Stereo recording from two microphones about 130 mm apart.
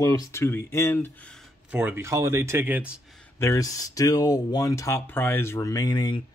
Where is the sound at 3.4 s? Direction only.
25° left (ahead or behind).